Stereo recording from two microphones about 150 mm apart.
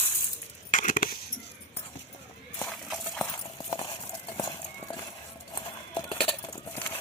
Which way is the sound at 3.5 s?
30° left (ahead or behind).